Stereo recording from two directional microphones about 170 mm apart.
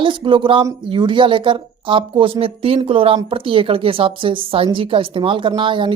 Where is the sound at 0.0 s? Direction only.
30° right (ahead or behind).